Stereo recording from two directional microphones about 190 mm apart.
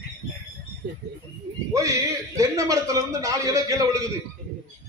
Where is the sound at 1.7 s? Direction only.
15° right (ahead or behind).